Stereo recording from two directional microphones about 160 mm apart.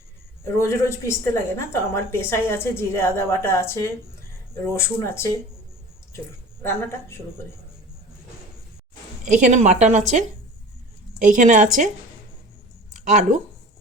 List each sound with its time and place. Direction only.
0.4 s a woman's voice: 15° left (ahead or behind)
6.6 s a woman's voice: 15° left (ahead or behind)
9.2 s a woman's voice: 50° right (ahead or behind)
11.2 s a woman's voice: 50° right (ahead or behind)
13.1 s a woman's voice: 50° right (ahead or behind)